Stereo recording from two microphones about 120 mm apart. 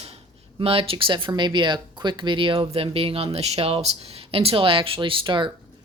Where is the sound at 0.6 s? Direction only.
55° right (ahead or behind).